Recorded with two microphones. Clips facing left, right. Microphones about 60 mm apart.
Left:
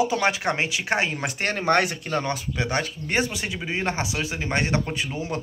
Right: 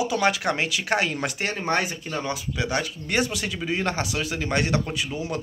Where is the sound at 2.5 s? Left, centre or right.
Left.